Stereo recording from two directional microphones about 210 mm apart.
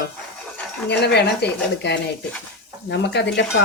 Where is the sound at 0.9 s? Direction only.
50° left (ahead or behind).